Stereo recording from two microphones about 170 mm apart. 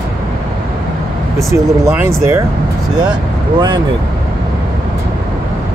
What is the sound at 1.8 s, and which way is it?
Speech, 15° right (ahead or behind).